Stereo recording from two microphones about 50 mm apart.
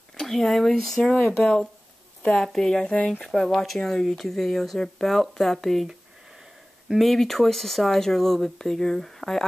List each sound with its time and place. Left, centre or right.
0.2 s speech: centre
1.4 s speech: centre
7.0 s speech: centre